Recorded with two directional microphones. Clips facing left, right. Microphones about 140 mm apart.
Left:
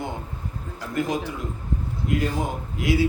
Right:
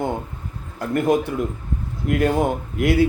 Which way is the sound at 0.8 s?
55° right (ahead or behind).